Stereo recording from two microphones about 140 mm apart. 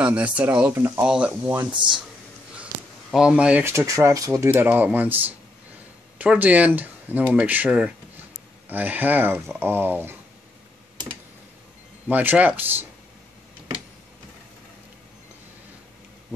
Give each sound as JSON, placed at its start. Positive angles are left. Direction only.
{"t": 0.0, "sound": "speech", "side_deg": -10}
{"t": 1.4, "sound": "speech", "side_deg": -20}
{"t": 1.7, "sound": "speech", "side_deg": -35}
{"t": 2.5, "sound": "speech", "side_deg": -5}
{"t": 12.1, "sound": "speech", "side_deg": -10}